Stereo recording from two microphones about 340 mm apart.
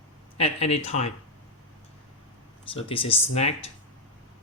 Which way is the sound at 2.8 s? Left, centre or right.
Centre.